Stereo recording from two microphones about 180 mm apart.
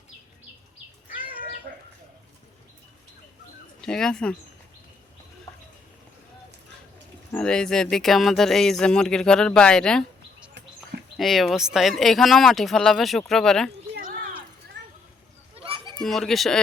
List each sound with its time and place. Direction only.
3.8 s speech: 5° left (ahead or behind)
7.3 s speech: 5° left (ahead or behind)
11.2 s speech: centre (ahead or behind)
14.8 s a sound: 80° right
15.5 s children playing: 30° right (ahead or behind)
16.0 s speech: centre (ahead or behind)